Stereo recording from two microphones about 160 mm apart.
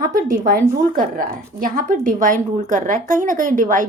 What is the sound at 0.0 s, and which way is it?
A woman's voice, 60° right (ahead or behind).